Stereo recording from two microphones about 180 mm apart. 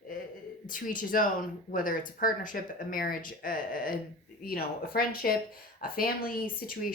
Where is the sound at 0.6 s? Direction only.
50° left (ahead or behind).